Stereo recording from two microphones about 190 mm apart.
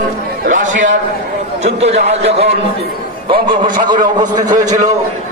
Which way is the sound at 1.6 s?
35° right (ahead or behind).